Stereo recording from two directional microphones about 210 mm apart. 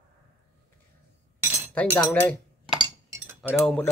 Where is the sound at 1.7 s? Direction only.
10° left (ahead or behind).